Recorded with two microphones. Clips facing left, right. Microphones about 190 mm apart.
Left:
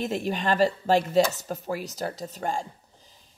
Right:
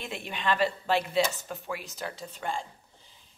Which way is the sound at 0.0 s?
40° left (ahead or behind).